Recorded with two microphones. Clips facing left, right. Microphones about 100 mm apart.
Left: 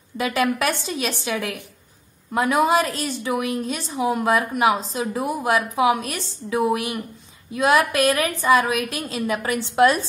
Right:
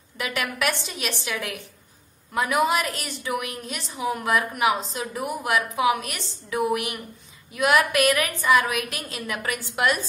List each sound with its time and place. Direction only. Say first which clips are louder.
0.2 s a woman's voice: left 6 dB; 35° left (ahead or behind)